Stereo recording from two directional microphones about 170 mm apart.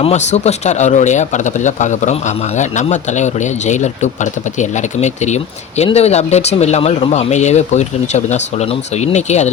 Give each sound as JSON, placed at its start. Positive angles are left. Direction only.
{"t": 0.0, "sound": "speech", "side_deg": 40}